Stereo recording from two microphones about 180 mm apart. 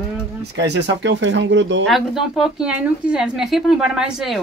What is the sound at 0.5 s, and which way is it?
Speech, 75° right (ahead or behind).